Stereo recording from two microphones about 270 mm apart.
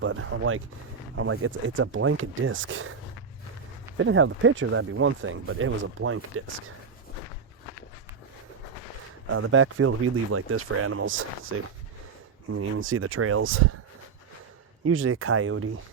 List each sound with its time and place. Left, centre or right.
0.0 s speech: right
3.9 s speech: right
9.3 s speech: right
12.5 s speech: right
14.8 s speech: right